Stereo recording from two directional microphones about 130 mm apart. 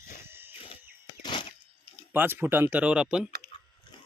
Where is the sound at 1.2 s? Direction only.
35° left (ahead or behind).